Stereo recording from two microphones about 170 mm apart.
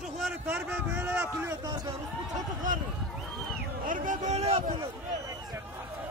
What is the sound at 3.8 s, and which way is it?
Speech, 50° right (ahead or behind).